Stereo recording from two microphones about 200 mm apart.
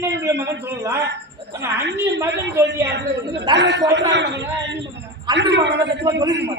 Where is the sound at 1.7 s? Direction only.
60° right (ahead or behind).